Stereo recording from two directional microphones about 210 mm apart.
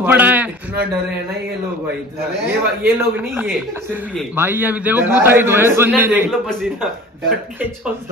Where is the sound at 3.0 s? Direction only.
10° right (ahead or behind).